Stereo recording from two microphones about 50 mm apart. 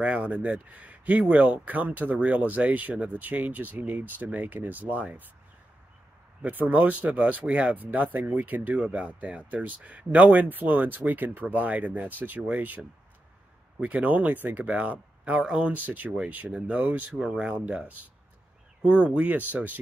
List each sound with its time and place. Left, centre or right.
0.0 s speech: right
6.4 s speech: right
15.4 s speech: centre
15.7 s speech: right
17.2 s speech: centre
17.6 s speech: right